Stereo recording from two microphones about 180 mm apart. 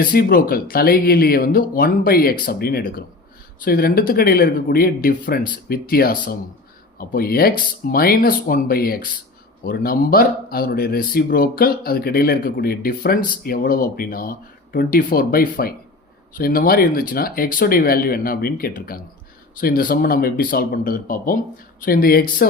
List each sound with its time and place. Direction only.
0.0 s a man's voice: 55° left (ahead or behind)